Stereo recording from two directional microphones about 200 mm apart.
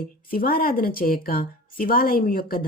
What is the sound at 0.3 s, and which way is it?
A woman's voice, 45° left (ahead or behind).